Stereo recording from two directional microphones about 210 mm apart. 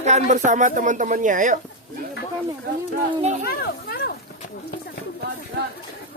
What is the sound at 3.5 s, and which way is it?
Speech, 45° left (ahead or behind).